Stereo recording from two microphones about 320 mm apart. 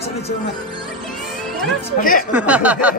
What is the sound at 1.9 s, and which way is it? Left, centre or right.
Speech, left.